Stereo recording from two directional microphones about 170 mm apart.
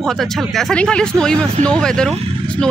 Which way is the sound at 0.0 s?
Centre (ahead or behind).